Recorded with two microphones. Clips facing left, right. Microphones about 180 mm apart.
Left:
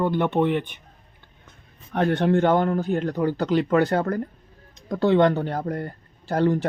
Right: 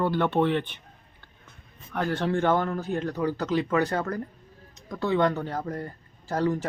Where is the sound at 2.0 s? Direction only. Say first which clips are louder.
Left 5 dB; 20° left (ahead or behind).